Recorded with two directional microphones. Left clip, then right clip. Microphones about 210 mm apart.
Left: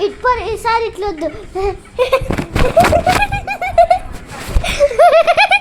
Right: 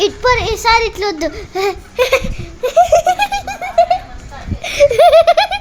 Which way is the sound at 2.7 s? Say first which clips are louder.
Right 1 dB; 35° right (ahead or behind).